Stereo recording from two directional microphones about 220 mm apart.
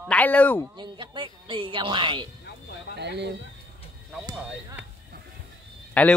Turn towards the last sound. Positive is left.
turn(degrees=5)  # may be behind; listen again after turning